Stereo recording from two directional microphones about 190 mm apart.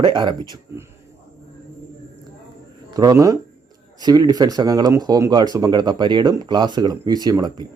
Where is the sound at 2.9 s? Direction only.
20° right (ahead or behind).